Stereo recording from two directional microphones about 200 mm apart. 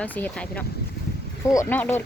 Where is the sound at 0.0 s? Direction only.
5° left (ahead or behind).